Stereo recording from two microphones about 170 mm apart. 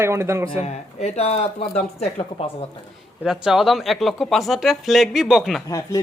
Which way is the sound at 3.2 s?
5° right (ahead or behind).